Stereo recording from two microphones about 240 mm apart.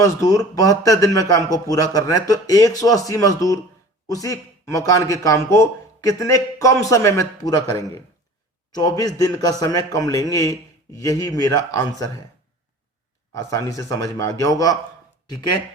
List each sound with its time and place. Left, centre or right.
0.0 s speech: centre
13.3 s speech: centre